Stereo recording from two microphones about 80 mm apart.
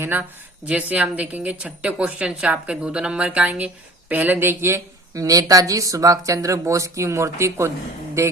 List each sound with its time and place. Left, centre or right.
0.0 s a woman's voice: right
5.1 s speech: right